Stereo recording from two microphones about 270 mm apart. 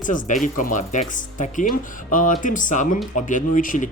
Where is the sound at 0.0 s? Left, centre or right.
Left.